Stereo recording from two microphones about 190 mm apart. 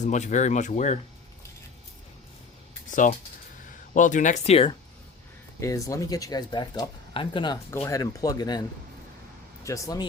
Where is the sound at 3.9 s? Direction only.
40° left (ahead or behind).